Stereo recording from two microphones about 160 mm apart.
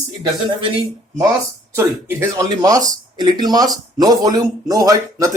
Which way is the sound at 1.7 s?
15° right (ahead or behind).